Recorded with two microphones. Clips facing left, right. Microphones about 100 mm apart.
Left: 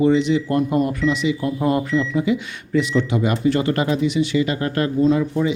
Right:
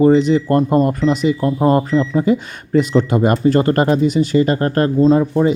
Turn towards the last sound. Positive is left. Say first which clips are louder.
# right 5 dB
turn(degrees=-40)  # may be behind; listen again after turning